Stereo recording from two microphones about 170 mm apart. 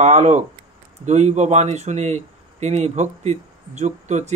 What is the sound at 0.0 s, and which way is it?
Speech, 40° right (ahead or behind).